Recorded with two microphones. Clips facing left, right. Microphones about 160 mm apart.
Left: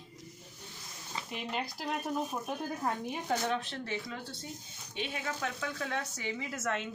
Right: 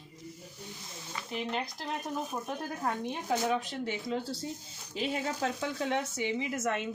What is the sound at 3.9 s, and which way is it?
A woman's voice, 30° right (ahead or behind).